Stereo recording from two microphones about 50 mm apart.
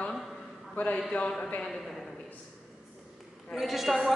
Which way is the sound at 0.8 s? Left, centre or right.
Left.